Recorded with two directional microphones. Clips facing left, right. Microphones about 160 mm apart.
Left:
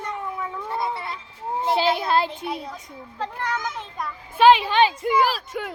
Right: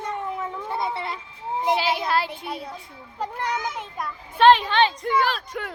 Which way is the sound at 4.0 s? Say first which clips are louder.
Left 1 dB; 5° left (ahead or behind).